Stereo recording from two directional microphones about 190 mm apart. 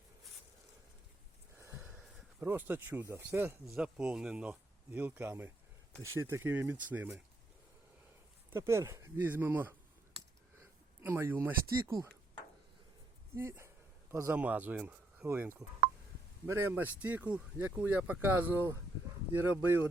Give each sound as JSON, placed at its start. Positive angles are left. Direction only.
{"t": 2.4, "sound": "speech", "side_deg": -10}
{"t": 8.5, "sound": "speech", "side_deg": -15}
{"t": 11.0, "sound": "speech", "side_deg": -10}
{"t": 13.3, "sound": "speech", "side_deg": -15}